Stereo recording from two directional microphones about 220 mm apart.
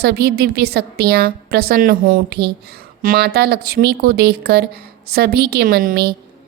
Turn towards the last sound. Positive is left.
turn(degrees=-40)  # may be behind; listen again after turning